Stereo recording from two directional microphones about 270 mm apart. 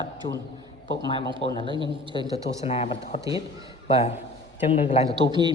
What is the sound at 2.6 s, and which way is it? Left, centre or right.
Speech, left.